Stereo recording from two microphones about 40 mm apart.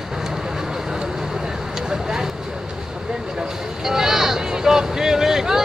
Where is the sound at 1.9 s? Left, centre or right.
Centre.